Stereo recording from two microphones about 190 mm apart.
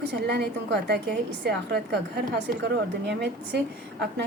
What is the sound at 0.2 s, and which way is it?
Speech, 55° right (ahead or behind).